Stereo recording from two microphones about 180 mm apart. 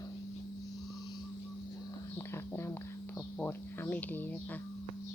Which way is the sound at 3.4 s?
10° left (ahead or behind).